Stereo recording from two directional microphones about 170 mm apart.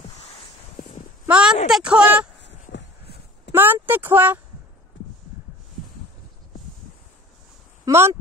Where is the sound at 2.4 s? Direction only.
90° left.